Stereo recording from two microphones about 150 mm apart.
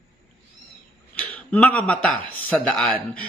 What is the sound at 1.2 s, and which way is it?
A man's voice, 10° left (ahead or behind).